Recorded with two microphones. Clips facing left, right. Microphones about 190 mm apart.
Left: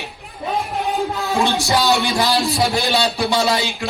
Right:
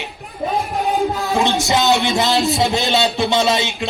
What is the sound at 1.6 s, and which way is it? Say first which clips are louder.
A man's voice: right 1 dB; 20° right (ahead or behind).